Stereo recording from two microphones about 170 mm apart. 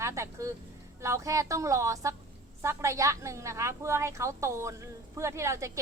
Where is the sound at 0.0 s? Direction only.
15° right (ahead or behind).